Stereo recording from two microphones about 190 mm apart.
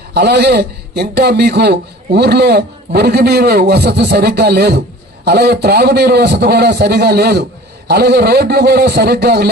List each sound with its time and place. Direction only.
0.1 s a man's voice: 60° right (ahead or behind)